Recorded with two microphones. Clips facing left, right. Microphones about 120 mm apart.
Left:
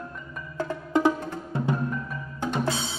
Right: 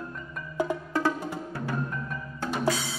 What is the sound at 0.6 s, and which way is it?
Music, 15° right (ahead or behind).